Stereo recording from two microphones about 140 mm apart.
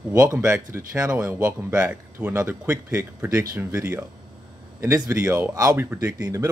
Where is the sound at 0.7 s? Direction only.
20° right (ahead or behind).